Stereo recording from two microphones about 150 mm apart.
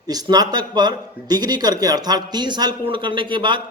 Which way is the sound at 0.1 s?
25° right (ahead or behind).